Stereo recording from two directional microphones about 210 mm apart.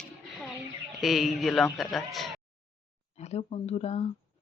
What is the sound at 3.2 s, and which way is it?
Speech, 30° left (ahead or behind).